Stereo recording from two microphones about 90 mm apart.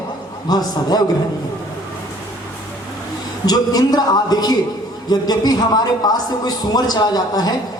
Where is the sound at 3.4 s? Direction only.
45° left (ahead or behind).